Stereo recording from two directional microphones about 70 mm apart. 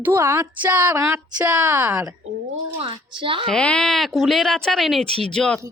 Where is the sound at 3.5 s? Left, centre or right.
Centre.